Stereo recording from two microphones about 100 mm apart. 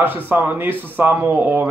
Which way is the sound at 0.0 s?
20° right (ahead or behind).